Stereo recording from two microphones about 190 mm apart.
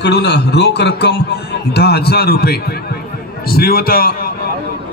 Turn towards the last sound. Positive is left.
turn(degrees=50)  # may be behind; listen again after turning